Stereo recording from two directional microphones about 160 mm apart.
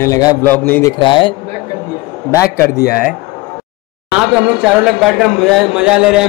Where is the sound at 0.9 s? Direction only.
30° left (ahead or behind).